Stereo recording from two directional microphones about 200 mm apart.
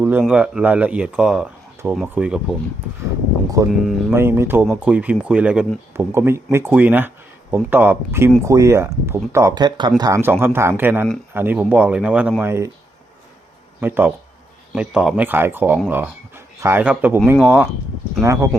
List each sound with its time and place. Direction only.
0.0 s speech: 10° right (ahead or behind)
3.7 s speech: centre (ahead or behind)
4.1 s speech: 10° right (ahead or behind)
13.8 s speech: 10° right (ahead or behind)